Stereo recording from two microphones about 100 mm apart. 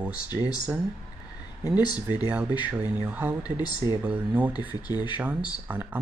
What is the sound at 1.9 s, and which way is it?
Speech, 40° left (ahead or behind).